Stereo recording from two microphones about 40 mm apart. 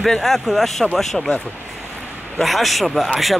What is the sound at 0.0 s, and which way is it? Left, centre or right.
Speech, centre.